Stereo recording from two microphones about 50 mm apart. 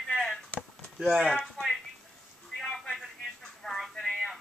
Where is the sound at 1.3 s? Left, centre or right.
Centre.